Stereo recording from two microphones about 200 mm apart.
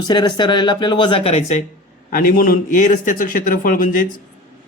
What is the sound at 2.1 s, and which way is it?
A man's voice, 45° left (ahead or behind).